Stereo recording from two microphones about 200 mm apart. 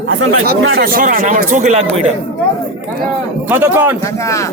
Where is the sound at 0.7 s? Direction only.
45° right (ahead or behind).